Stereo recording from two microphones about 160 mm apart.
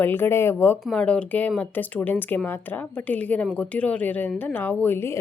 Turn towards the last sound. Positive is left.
turn(degrees=15)  # may be behind; listen again after turning